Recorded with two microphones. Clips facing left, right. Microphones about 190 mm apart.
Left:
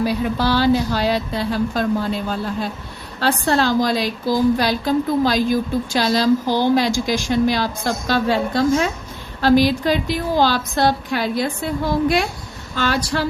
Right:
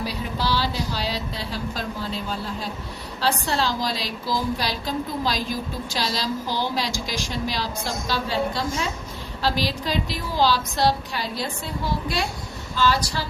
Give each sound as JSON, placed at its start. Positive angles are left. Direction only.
{"t": 0.0, "sound": "a woman's voice", "side_deg": 50}